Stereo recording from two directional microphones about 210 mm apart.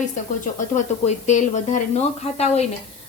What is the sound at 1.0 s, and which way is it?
A woman's voice, 35° left (ahead or behind).